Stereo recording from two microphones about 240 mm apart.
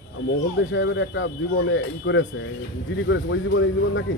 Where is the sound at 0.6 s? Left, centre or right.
Left.